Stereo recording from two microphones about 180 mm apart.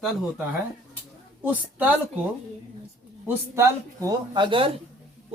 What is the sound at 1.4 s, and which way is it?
Speech, 10° right (ahead or behind).